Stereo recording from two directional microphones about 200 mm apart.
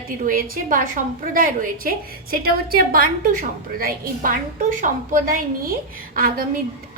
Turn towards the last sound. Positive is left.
turn(degrees=-45)  # may be behind; listen again after turning